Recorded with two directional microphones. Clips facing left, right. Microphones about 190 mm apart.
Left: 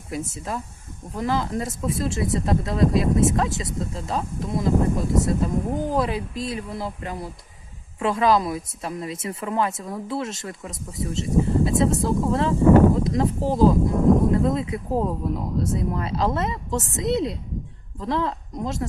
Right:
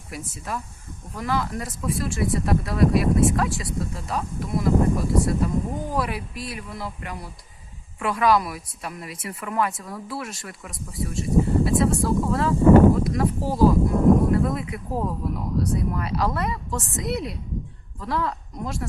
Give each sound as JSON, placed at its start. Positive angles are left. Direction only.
{"t": 0.1, "sound": "speech", "side_deg": 25}